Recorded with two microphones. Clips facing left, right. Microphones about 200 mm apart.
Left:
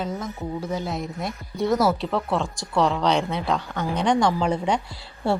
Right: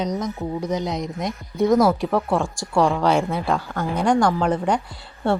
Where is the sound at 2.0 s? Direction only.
15° right (ahead or behind).